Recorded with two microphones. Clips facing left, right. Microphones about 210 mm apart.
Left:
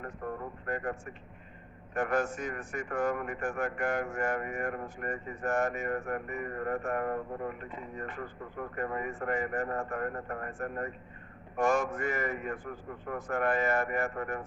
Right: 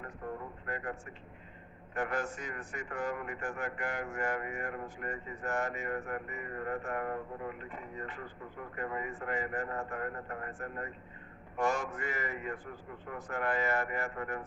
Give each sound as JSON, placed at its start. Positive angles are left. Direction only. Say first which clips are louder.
{"t": 0.7, "sound": "a man's voice", "louder": "left 5 dB", "side_deg": 45}